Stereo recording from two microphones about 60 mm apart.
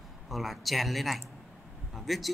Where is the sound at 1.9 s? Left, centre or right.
Centre.